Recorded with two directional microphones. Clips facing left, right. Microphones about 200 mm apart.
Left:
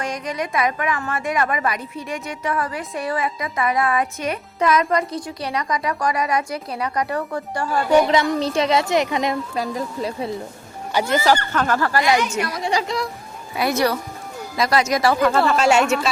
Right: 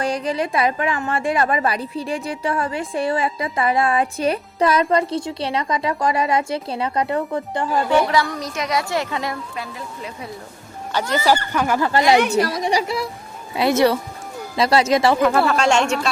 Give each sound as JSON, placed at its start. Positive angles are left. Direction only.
{"t": 0.0, "sound": "a woman's voice", "side_deg": -30}
{"t": 7.9, "sound": "a woman's voice", "side_deg": 20}
{"t": 9.6, "sound": "speech", "side_deg": 35}
{"t": 10.9, "sound": "speech", "side_deg": 10}
{"t": 11.3, "sound": "speech", "side_deg": -10}
{"t": 11.9, "sound": "a woman's voice", "side_deg": -25}
{"t": 12.6, "sound": "speech", "side_deg": -15}
{"t": 13.6, "sound": "a woman's voice", "side_deg": -25}
{"t": 15.2, "sound": "speech", "side_deg": -5}